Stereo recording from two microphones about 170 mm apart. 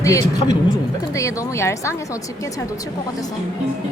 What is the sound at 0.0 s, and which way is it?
A woman's voice, 20° left (ahead or behind).